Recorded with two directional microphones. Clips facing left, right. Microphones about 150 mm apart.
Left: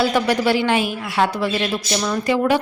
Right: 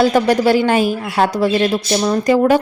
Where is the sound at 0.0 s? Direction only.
45° right (ahead or behind).